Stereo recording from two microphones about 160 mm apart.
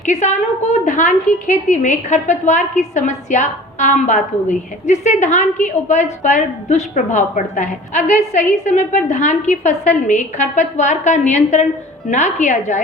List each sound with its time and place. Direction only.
0.0 s a woman's voice: 50° left (ahead or behind)